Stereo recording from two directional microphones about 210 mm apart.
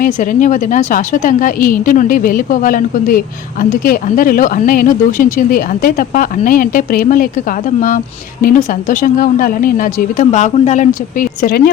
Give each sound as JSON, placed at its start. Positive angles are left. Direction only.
{"t": 0.0, "sound": "speech", "side_deg": 40}